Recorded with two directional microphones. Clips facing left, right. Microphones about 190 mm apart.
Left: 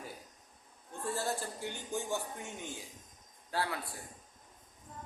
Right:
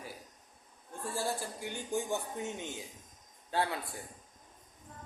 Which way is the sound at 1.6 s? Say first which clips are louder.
Right 5 dB; 15° right (ahead or behind).